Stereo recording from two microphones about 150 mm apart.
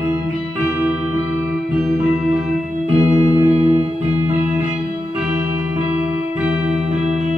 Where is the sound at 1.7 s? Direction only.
5° right (ahead or behind).